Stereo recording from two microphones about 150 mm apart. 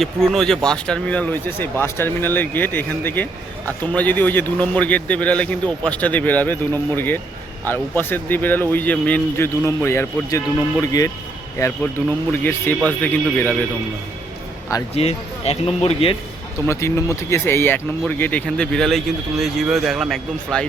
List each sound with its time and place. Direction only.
0.0 s a man's voice: 5° left (ahead or behind); by 11.1 s 20° left (ahead or behind)
12.3 s a man's voice: 15° left (ahead or behind)
14.9 s speech: 45° left (ahead or behind)
16.6 s a man's voice: 20° left (ahead or behind); by 20.7 s 5° left (ahead or behind)